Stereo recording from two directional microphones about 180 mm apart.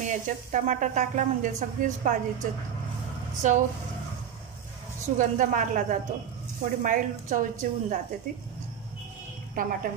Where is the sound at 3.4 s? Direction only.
45° right (ahead or behind).